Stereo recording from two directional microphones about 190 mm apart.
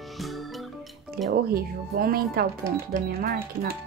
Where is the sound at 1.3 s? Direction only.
50° right (ahead or behind).